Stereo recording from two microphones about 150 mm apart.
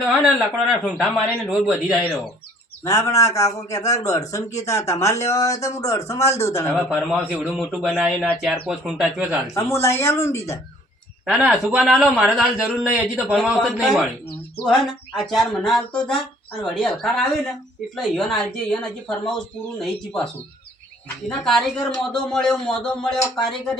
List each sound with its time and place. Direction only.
0.3 s a man's voice: centre (ahead or behind)
2.8 s speech: 20° left (ahead or behind)
6.7 s a man's voice: 5° right (ahead or behind)
9.6 s speech: 20° left (ahead or behind)
11.3 s a man's voice: 5° right (ahead or behind)
13.3 s a man's voice: centre (ahead or behind)
21.2 s a man's voice: centre (ahead or behind)